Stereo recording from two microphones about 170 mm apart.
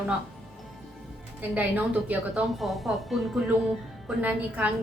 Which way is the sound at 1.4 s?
10° right (ahead or behind).